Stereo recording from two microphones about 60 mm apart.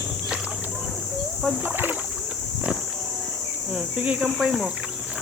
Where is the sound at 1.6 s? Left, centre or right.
Right.